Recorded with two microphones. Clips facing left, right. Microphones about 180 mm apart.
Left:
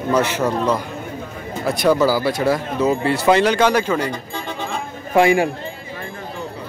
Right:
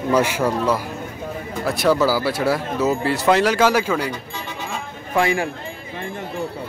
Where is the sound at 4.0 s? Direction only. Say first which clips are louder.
Left 2 dB; 50° left (ahead or behind).